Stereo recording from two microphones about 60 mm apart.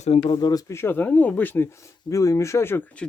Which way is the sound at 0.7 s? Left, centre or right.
Left.